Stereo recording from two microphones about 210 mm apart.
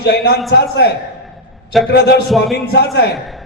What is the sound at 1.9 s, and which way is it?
A man's voice, 50° left (ahead or behind).